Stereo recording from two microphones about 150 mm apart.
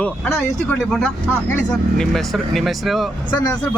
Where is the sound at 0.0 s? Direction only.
5° left (ahead or behind).